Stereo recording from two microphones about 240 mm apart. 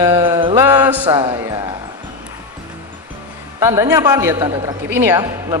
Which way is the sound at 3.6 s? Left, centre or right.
Centre.